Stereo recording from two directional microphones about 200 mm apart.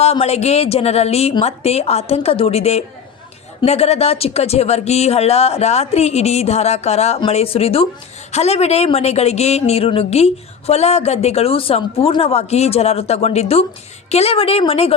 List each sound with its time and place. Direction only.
0.0 s a woman's voice: 30° left (ahead or behind)